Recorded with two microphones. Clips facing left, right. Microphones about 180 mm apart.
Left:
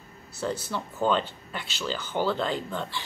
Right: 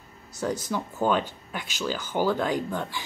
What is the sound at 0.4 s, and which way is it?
Speech, 10° right (ahead or behind).